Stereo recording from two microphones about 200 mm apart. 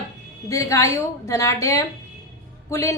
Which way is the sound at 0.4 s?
15° left (ahead or behind).